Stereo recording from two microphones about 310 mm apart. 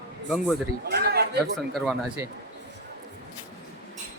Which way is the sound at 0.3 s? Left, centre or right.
Centre.